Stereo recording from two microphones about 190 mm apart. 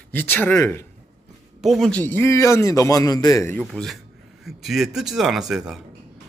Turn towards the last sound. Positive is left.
turn(degrees=-5)  # may be behind; listen again after turning